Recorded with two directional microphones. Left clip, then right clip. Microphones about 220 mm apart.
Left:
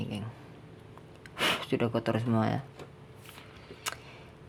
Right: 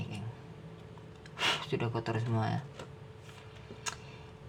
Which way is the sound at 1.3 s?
40° left (ahead or behind).